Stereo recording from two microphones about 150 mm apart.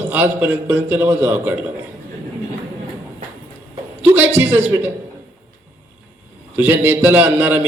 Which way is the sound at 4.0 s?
10° right (ahead or behind).